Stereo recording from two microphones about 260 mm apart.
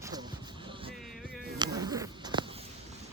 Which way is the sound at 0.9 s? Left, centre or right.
Centre.